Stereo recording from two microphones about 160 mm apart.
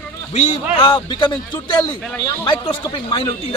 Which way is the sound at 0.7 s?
30° left (ahead or behind).